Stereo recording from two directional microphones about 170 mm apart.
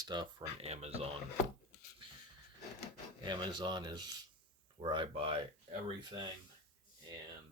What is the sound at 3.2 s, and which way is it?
Speech, 25° right (ahead or behind).